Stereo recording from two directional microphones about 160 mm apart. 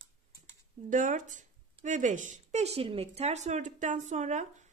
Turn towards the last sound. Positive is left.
turn(degrees=-50)  # may be behind; listen again after turning